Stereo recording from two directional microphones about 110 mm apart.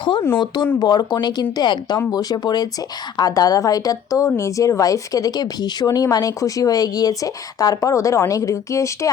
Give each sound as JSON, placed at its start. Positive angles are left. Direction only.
{"t": 0.0, "sound": "speech", "side_deg": 50}